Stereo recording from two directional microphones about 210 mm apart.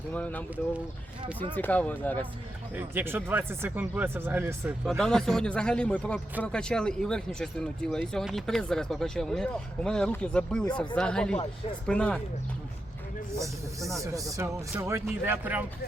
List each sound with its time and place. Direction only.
0.1 s speech: 10° left (ahead or behind)
1.5 s speech: 10° left (ahead or behind)
2.7 s speech: 10° right (ahead or behind)
4.9 s speech: centre (ahead or behind)
14.0 s speech: 15° right (ahead or behind)